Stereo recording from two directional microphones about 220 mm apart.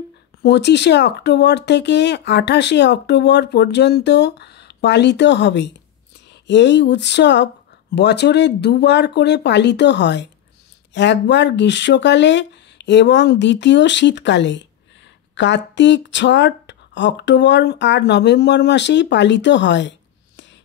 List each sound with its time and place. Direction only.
0.4 s speech: 50° left (ahead or behind)